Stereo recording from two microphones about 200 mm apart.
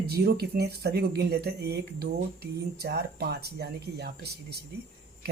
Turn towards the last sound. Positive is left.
turn(degrees=-55)  # may be behind; listen again after turning